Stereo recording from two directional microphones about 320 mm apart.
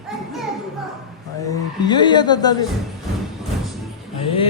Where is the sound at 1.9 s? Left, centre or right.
Centre.